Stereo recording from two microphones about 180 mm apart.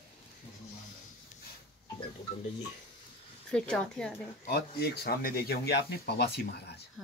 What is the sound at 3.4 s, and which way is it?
Speech, 5° left (ahead or behind).